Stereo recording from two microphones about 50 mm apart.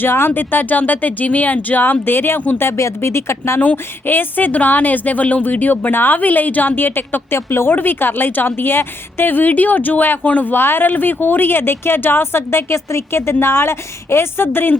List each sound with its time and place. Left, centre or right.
0.0 s speech: left
2.7 s speech: left
3.6 s speech: left
7.8 s speech: left
10.5 s speech: left